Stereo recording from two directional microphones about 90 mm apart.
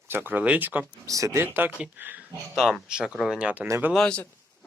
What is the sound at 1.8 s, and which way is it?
Speech, 20° right (ahead or behind).